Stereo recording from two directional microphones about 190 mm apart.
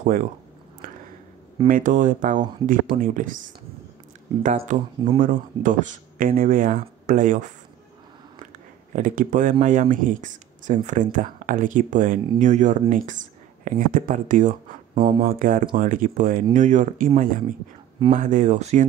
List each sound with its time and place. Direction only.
0.0 s speech: 45° right (ahead or behind)
1.7 s speech: 45° right (ahead or behind)
8.9 s speech: 45° right (ahead or behind)
15.0 s speech: 25° right (ahead or behind)
15.2 s speech: 45° right (ahead or behind)